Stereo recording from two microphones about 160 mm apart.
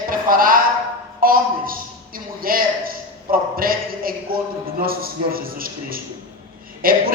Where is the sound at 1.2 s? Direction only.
65° right (ahead or behind).